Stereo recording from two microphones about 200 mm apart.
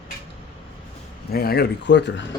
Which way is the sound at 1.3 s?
50° left (ahead or behind).